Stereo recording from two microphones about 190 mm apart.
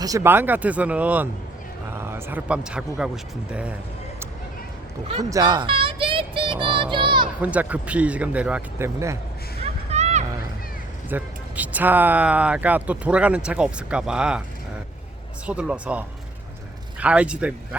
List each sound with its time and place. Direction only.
0.0 s speech: 15° right (ahead or behind)
5.3 s child singing: 20° right (ahead or behind)
7.4 s speech: 10° right (ahead or behind)
9.9 s a sound: 35° right (ahead or behind)
11.1 s speech: 10° right (ahead or behind)
15.4 s speech: 5° right (ahead or behind)